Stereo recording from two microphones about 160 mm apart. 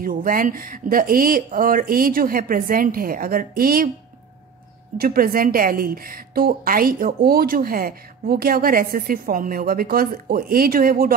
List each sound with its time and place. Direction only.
0.0 s a woman's voice: 60° right (ahead or behind)
4.9 s a woman's voice: 65° right (ahead or behind)